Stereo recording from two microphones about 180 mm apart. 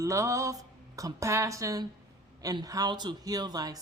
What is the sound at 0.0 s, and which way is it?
Speech, 15° right (ahead or behind).